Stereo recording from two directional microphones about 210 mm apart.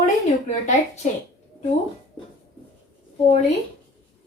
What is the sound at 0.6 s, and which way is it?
Speech, 35° left (ahead or behind).